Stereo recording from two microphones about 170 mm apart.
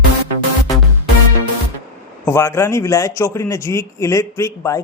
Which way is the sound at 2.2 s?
15° left (ahead or behind).